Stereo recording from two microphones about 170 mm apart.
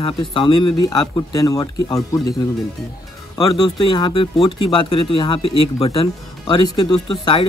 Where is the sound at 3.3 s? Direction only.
20° left (ahead or behind).